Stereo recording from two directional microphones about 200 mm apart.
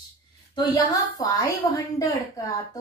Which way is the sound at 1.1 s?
15° left (ahead or behind).